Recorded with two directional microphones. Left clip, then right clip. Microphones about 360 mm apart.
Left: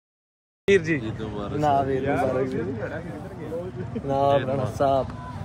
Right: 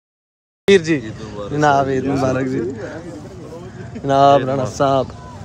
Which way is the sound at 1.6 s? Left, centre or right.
Right.